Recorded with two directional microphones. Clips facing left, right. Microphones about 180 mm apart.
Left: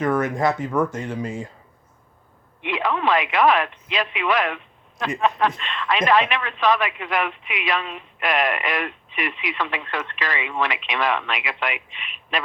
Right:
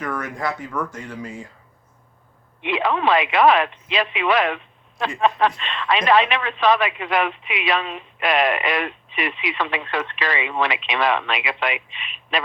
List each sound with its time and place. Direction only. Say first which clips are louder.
0.0 s speech: left 6 dB; 25° left (ahead or behind)
2.6 s speech: right 2 dB; 25° right (ahead or behind)